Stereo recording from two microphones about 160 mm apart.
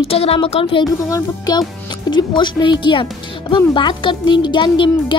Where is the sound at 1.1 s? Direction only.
20° left (ahead or behind).